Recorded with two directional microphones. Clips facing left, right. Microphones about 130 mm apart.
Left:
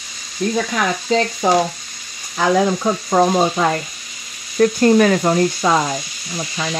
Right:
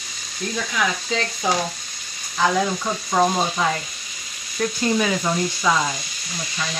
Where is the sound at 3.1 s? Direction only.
50° left (ahead or behind).